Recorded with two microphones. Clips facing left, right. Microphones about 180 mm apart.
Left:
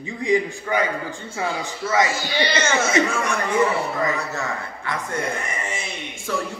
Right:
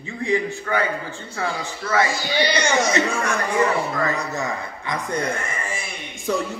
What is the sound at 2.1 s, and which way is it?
Speech, 15° right (ahead or behind).